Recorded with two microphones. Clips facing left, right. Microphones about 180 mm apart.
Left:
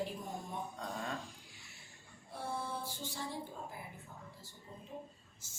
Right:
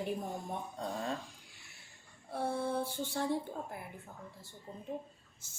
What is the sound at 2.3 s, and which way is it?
A woman's voice, 60° right (ahead or behind).